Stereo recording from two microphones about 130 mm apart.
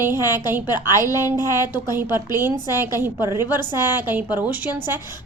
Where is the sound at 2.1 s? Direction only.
20° right (ahead or behind).